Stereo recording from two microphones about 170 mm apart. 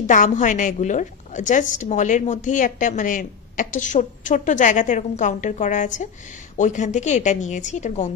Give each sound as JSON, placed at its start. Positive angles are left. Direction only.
{"t": 0.0, "sound": "a woman's voice", "side_deg": 50}